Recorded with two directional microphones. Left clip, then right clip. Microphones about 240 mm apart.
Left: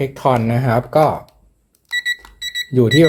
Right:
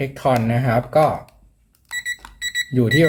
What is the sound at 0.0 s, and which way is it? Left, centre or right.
Speech, left.